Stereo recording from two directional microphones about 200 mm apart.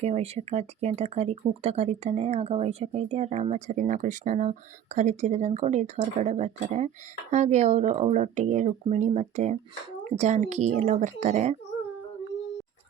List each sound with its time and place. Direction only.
0.0 s speech: 30° right (ahead or behind)